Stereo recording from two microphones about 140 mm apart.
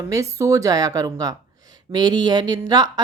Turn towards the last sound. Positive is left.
turn(degrees=-25)  # may be behind; listen again after turning